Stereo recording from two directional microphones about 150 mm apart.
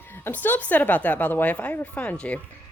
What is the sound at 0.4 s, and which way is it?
A woman's voice, 10° left (ahead or behind).